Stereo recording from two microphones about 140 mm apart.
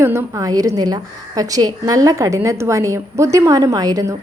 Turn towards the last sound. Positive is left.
turn(degrees=-25)  # may be behind; listen again after turning